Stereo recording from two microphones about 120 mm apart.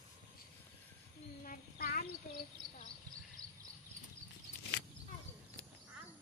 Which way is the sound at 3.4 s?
30° right (ahead or behind).